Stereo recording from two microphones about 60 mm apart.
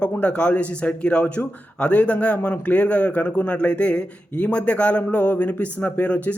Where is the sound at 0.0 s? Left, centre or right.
Centre.